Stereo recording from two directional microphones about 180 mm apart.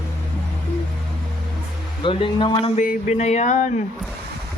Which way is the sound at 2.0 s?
30° left (ahead or behind).